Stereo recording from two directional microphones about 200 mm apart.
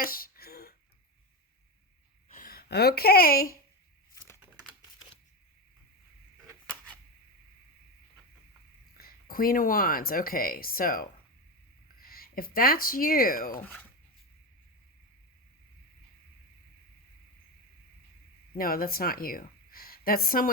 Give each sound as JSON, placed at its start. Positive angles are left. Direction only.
{"t": 0.0, "sound": "throat clearing", "side_deg": 45}
{"t": 2.3, "sound": "speech", "side_deg": 45}
{"t": 4.1, "sound": "computer keyboard", "side_deg": 15}
{"t": 9.0, "sound": "speech", "side_deg": 50}
{"t": 18.5, "sound": "speech", "side_deg": 45}